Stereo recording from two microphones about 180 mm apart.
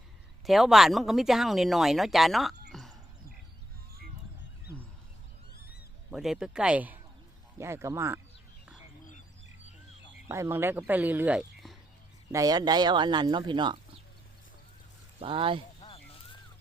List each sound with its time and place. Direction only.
0.4 s speech: centre (ahead or behind)
5.5 s a sound: 60° left (ahead or behind)
6.1 s speech: centre (ahead or behind)
10.2 s speech: 15° right (ahead or behind)
12.3 s speech: 20° right (ahead or behind)
15.2 s speech: 30° right (ahead or behind)